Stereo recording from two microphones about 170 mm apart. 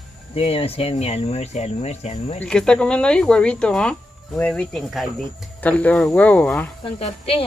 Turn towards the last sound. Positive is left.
turn(degrees=35)  # may be behind; listen again after turning